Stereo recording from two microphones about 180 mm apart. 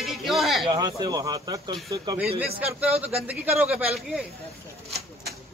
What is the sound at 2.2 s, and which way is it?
Speech, 60° right (ahead or behind).